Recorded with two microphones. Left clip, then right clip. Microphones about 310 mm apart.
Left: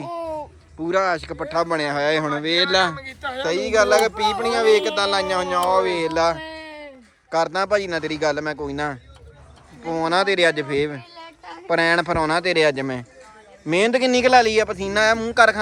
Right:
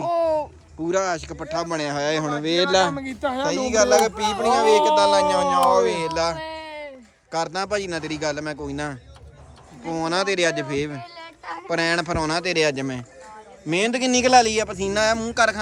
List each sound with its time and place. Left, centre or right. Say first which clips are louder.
0.0 s speech: right 7 dB; centre
3.1 s speech: right 3 dB; right
3.4 s speech: left 2 dB; centre